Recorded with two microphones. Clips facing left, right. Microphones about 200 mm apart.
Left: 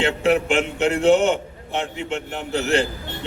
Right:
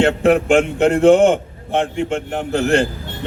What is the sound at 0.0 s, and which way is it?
A man's voice, 50° right (ahead or behind).